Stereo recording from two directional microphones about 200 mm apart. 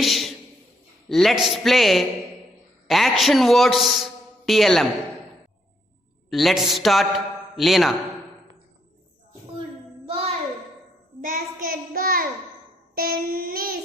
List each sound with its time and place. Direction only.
0.0 s music: centre (ahead or behind)
1.0 s a woman's voice: centre (ahead or behind)
6.3 s a woman's voice: centre (ahead or behind)
10.1 s music: 30° right (ahead or behind)
11.2 s child singing: 40° right (ahead or behind)